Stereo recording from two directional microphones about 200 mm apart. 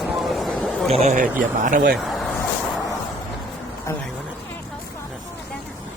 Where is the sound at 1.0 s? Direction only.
40° right (ahead or behind).